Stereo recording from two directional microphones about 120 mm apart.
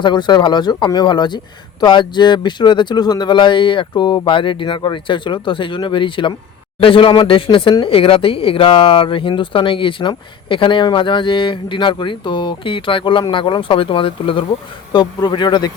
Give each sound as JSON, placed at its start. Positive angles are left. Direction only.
{"t": 0.0, "sound": "speech", "side_deg": 40}